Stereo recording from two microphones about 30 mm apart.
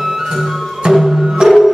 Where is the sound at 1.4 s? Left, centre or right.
Centre.